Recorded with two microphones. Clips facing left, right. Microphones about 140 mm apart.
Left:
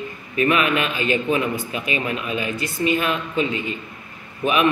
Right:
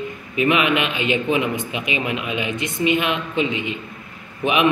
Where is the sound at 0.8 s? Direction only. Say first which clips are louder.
Even; 40° left (ahead or behind).